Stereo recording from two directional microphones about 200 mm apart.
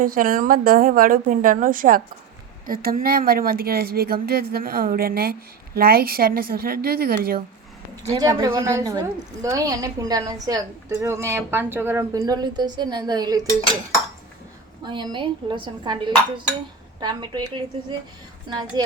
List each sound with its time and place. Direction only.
0.0 s speech: 45° right (ahead or behind)
8.1 s a woman's voice: 20° right (ahead or behind)
14.8 s speech: 25° right (ahead or behind)